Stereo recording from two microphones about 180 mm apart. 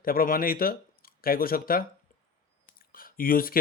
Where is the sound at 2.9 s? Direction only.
55° left (ahead or behind).